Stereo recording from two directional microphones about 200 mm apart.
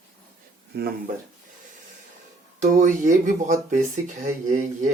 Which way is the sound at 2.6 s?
35° right (ahead or behind).